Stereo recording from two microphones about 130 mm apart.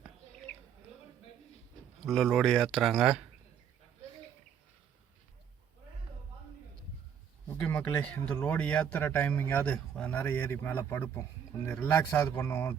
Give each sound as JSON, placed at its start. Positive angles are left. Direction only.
{"t": 0.5, "sound": "rodents", "side_deg": 5}
{"t": 2.0, "sound": "speech", "side_deg": 0}
{"t": 7.4, "sound": "a sound", "side_deg": 15}
{"t": 8.2, "sound": "a man's voice", "side_deg": 10}